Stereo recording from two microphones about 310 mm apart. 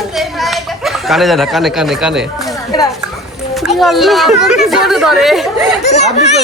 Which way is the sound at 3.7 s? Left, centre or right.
Centre.